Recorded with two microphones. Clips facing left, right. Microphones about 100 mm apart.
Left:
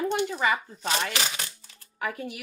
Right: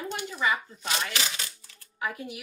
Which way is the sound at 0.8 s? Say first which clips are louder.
Left 3 dB; 35° left (ahead or behind).